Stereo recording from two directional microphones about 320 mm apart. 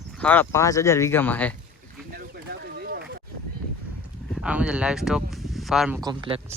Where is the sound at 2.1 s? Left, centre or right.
Right.